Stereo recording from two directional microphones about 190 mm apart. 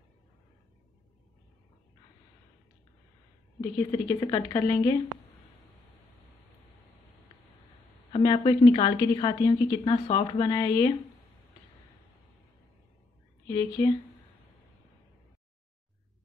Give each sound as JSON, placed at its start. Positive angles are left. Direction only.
{"t": 3.7, "sound": "speech", "side_deg": 15}
{"t": 8.1, "sound": "a woman's voice", "side_deg": 25}
{"t": 13.8, "sound": "speech", "side_deg": 15}